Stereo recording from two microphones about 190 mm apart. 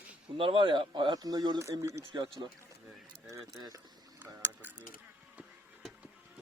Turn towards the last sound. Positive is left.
turn(degrees=-10)  # may be behind; listen again after turning